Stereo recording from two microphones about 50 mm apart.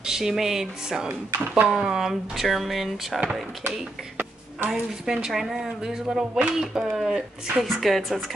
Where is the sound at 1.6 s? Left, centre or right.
Centre.